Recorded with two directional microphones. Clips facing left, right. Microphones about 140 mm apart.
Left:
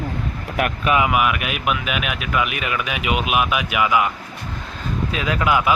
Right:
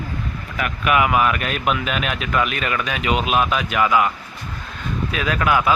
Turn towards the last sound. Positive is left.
turn(degrees=20)  # may be behind; listen again after turning